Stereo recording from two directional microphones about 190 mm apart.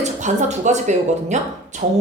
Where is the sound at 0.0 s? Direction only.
40° right (ahead or behind).